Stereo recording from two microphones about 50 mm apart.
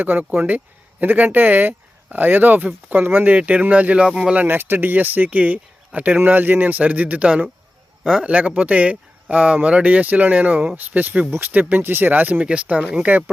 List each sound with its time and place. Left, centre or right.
0.0 s speech: right; by 4.4 s centre
4.4 s speech: right
11.7 s speech: right